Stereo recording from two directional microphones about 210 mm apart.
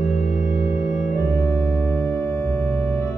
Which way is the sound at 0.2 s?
40° left (ahead or behind).